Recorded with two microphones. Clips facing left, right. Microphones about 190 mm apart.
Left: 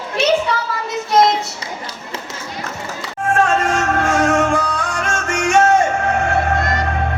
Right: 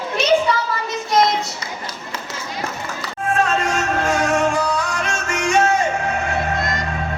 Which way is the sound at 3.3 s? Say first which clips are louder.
Left 3 dB; 50° left (ahead or behind).